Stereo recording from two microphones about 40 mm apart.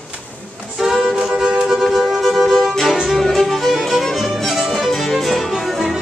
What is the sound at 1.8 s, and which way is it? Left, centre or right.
Music, centre.